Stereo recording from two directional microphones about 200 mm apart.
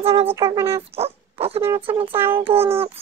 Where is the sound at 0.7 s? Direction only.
30° right (ahead or behind).